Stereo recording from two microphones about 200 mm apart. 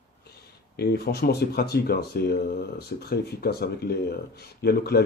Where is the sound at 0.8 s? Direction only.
50° left (ahead or behind).